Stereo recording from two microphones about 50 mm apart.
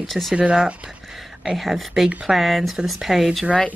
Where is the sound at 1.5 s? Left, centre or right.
Centre.